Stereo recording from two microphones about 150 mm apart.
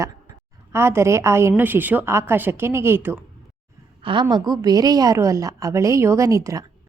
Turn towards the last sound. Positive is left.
turn(degrees=-20)  # may be behind; listen again after turning